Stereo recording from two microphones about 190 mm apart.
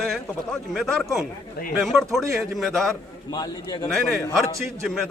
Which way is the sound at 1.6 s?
55° left (ahead or behind).